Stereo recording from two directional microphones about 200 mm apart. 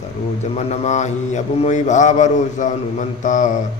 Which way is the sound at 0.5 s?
35° left (ahead or behind).